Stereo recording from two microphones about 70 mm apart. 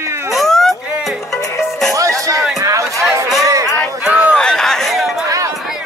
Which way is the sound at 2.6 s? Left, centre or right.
Right.